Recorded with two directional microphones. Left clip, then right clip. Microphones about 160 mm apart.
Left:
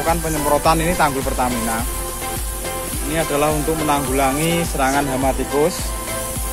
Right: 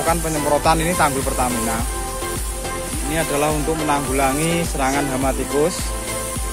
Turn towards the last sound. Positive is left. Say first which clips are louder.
# left 1 dB
turn(degrees=10)  # may be behind; listen again after turning